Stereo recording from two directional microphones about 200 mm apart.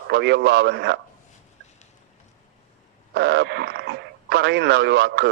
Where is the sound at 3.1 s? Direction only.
55° right (ahead or behind).